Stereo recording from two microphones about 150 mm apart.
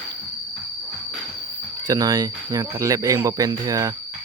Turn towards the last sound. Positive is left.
turn(degrees=-25)  # may be behind; listen again after turning